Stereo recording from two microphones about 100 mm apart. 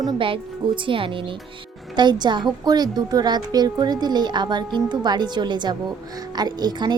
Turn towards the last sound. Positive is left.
turn(degrees=-45)  # may be behind; listen again after turning